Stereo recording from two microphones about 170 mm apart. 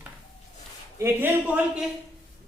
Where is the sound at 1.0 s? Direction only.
15° right (ahead or behind).